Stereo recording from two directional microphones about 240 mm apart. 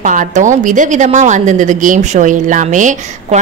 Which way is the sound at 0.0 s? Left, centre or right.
Right.